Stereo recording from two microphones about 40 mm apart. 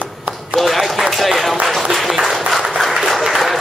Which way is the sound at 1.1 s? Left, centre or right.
Centre.